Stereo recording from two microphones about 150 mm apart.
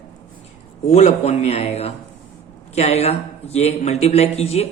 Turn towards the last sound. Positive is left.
turn(degrees=45)  # may be behind; listen again after turning